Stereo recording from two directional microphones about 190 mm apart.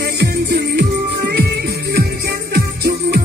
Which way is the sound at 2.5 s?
55° right (ahead or behind).